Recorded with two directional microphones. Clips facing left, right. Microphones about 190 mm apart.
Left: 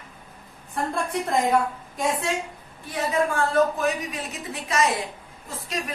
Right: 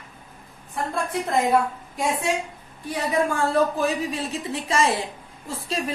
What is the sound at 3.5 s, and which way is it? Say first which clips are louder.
A woman's voice: left 1 dB; 30° right (ahead or behind).